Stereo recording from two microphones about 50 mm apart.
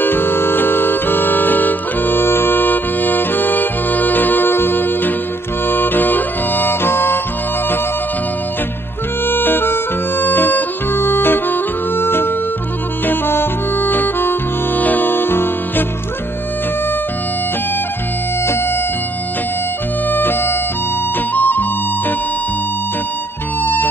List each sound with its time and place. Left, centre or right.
0.0 s music: left
9.3 s music: left
20.1 s music: left
23.6 s music: left